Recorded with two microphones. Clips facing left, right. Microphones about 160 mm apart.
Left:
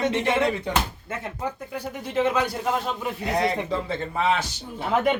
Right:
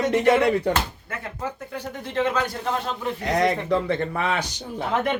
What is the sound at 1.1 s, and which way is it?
A man's voice, 10° left (ahead or behind).